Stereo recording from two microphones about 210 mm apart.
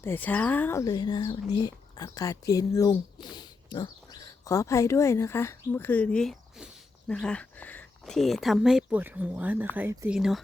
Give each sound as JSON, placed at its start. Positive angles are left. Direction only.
{"t": 0.0, "sound": "speech", "side_deg": 10}
{"t": 10.2, "sound": "speech", "side_deg": 0}